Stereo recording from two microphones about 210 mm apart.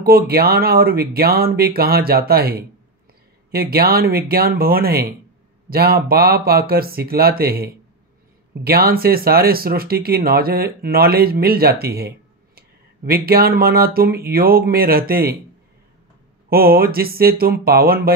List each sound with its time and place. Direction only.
0.0 s speech: 45° right (ahead or behind)
16.4 s speech: 45° right (ahead or behind)